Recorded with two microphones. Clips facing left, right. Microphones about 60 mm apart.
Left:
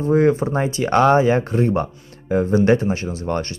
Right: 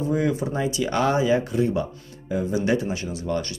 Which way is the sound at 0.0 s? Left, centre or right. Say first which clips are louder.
Left 7 dB; left.